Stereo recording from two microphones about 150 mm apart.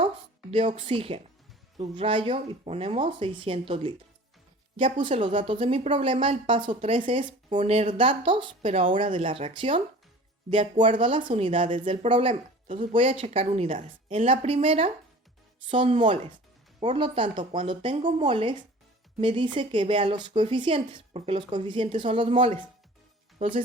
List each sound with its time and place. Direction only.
0.5 s a woman's voice: 35° right (ahead or behind)
4.9 s a woman's voice: 35° right (ahead or behind)
12.6 s speech: 55° right (ahead or behind)
12.9 s a woman's voice: 35° right (ahead or behind)